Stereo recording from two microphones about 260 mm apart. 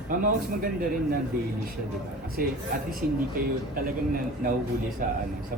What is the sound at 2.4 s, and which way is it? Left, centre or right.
Speech, right.